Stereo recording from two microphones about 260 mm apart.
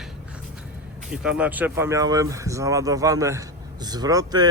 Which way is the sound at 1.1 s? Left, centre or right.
Centre.